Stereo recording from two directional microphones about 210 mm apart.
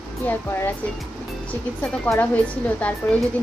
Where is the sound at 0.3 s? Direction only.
10° left (ahead or behind).